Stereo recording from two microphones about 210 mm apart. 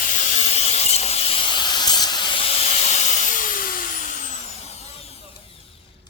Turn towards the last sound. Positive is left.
turn(degrees=30)  # may be behind; listen again after turning